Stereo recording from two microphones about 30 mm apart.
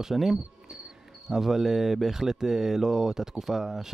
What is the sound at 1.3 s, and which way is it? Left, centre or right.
Speech, centre.